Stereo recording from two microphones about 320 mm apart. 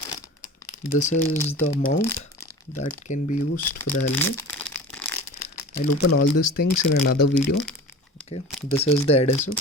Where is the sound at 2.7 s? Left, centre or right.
Left.